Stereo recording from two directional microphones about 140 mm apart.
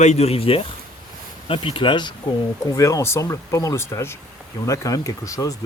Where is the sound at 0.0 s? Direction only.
50° left (ahead or behind); by 2.1 s 35° left (ahead or behind).